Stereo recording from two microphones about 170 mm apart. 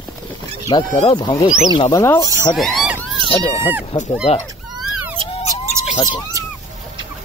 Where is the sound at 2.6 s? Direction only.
Centre (ahead or behind).